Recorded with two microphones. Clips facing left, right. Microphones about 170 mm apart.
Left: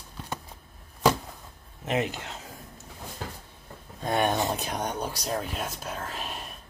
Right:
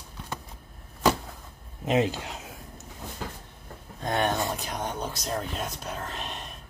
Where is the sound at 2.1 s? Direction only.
15° right (ahead or behind).